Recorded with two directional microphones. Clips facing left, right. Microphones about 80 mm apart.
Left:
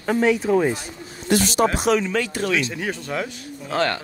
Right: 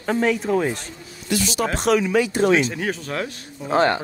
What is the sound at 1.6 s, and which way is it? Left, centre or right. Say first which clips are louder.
Speech: right 1 dB; centre.